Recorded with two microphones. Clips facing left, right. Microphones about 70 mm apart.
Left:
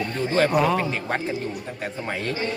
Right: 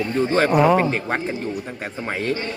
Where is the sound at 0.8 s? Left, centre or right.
Right.